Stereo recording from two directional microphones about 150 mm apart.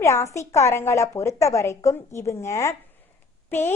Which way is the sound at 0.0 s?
20° left (ahead or behind).